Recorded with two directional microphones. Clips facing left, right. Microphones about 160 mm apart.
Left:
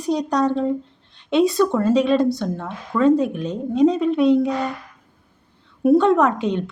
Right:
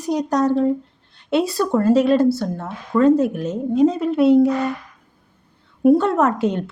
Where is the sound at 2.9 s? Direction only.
20° right (ahead or behind).